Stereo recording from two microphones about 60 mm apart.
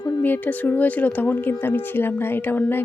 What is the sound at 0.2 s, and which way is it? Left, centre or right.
Speech, left.